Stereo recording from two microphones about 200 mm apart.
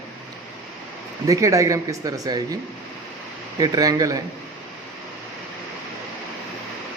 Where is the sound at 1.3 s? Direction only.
15° right (ahead or behind).